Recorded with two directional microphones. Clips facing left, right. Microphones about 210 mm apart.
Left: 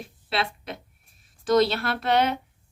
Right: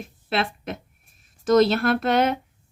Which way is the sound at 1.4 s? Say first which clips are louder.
Right 4 dB; 45° right (ahead or behind).